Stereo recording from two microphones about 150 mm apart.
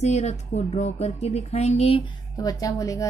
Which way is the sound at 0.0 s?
50° left (ahead or behind).